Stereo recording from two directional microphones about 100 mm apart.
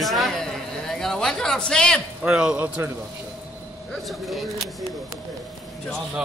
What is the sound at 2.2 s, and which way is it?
Speech, 10° right (ahead or behind).